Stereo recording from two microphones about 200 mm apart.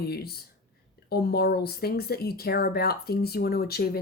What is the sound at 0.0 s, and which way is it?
A woman's voice, 50° left (ahead or behind).